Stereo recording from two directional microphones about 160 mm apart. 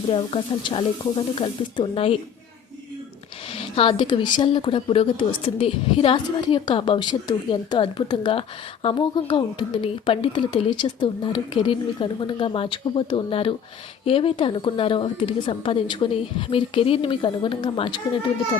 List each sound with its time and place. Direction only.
0.1 s a woman's voice: 30° left (ahead or behind)
3.5 s a woman's voice: 35° left (ahead or behind)